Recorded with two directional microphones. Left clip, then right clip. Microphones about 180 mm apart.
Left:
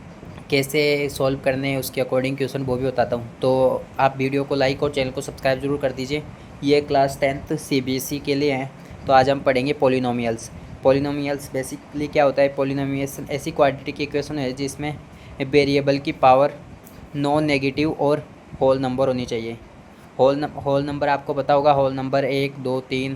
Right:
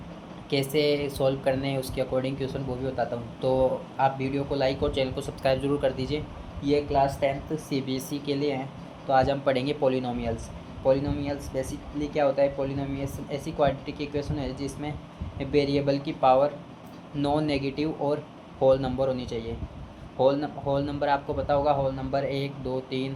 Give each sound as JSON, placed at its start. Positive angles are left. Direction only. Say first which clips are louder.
{"t": 0.5, "sound": "speech", "louder": "left 5 dB", "side_deg": 35}
{"t": 6.6, "sound": "speech", "louder": "left 6 dB", "side_deg": 50}
{"t": 18.6, "sound": "speech", "louder": "left 4 dB", "side_deg": 30}
{"t": 21.4, "sound": "speech", "louder": "left 9 dB", "side_deg": 50}